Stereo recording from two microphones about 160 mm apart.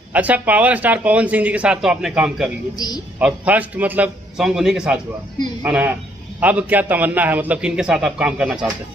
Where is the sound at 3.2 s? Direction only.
5° right (ahead or behind).